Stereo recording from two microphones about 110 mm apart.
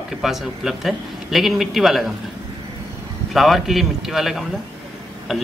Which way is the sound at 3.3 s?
Centre (ahead or behind).